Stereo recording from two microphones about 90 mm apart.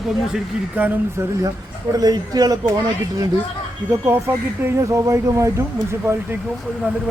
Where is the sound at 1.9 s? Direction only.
45° right (ahead or behind).